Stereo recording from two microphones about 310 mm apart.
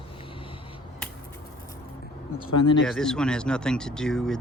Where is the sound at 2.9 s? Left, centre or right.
Centre.